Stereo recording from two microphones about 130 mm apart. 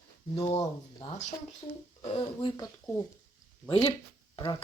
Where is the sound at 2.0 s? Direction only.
45° left (ahead or behind).